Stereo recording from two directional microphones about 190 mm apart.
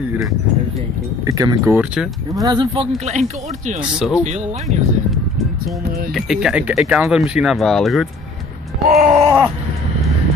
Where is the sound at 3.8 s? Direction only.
5° right (ahead or behind).